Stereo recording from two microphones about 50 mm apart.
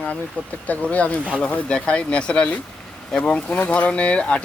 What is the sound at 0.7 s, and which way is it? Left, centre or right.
Speech, left.